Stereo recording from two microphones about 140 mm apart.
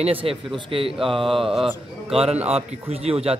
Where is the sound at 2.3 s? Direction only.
50° right (ahead or behind).